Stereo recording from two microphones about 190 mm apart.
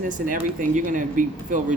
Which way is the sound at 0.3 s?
45° right (ahead or behind).